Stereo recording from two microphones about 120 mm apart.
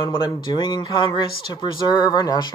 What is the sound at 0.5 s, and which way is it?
Speech, 35° left (ahead or behind).